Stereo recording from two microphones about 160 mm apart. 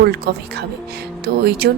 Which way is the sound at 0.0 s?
90° right.